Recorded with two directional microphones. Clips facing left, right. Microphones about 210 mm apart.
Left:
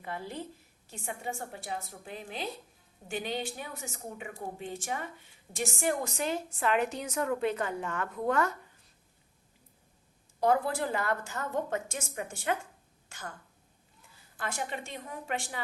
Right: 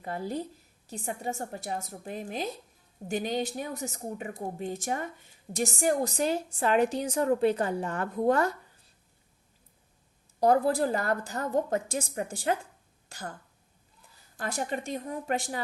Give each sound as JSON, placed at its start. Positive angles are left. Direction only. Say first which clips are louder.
{"t": 0.0, "sound": "a woman's voice", "louder": "right 5 dB", "side_deg": -40}
{"t": 10.4, "sound": "a woman's voice", "louder": "right 4 dB", "side_deg": -40}
{"t": 14.3, "sound": "a woman's voice", "louder": "right 4 dB", "side_deg": -40}